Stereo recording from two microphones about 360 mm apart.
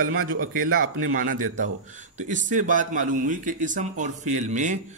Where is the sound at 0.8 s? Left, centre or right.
Right.